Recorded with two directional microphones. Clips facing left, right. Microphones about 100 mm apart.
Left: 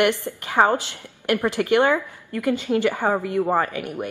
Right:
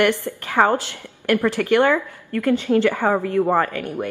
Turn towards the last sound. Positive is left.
turn(degrees=15)  # may be behind; listen again after turning